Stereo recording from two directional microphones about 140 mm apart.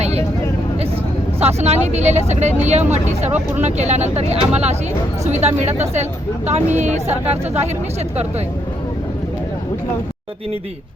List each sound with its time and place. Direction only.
0.0 s vehicle: 50° right (ahead or behind)
1.4 s speech: 50° right (ahead or behind)